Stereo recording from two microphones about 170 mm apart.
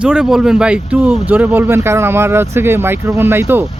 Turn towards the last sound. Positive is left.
turn(degrees=-15)  # may be behind; listen again after turning